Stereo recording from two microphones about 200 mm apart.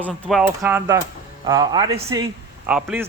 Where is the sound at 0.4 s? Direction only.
15° right (ahead or behind).